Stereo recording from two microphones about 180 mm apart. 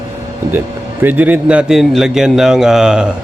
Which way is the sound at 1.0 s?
10° right (ahead or behind).